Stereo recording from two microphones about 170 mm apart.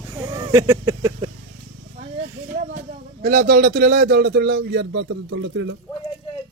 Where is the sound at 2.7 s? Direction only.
60° right (ahead or behind); by 5.7 s 90° right.